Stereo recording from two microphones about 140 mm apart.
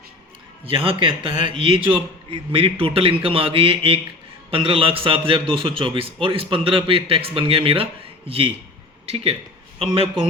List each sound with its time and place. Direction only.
0.6 s a man's voice: 40° right (ahead or behind)